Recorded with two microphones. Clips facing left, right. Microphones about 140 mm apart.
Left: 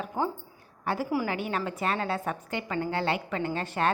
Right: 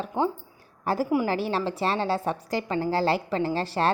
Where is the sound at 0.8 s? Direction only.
40° right (ahead or behind).